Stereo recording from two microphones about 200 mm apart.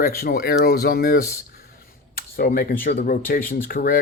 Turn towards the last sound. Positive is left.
turn(degrees=45)  # may be behind; listen again after turning